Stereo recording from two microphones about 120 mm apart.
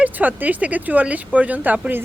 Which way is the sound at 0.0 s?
15° right (ahead or behind).